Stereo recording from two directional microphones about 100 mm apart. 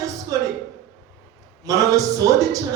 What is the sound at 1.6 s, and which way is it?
Speech, 35° right (ahead or behind).